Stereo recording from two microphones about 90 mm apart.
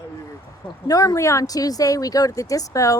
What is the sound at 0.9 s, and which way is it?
Speech, 40° left (ahead or behind).